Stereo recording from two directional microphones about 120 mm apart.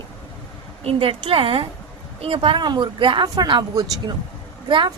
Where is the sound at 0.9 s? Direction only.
50° right (ahead or behind).